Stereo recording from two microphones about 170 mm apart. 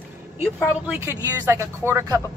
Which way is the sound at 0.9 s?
15° right (ahead or behind).